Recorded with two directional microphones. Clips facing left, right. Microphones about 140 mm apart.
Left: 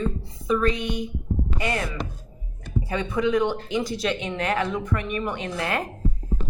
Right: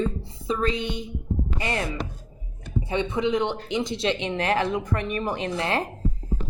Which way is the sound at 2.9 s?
20° right (ahead or behind).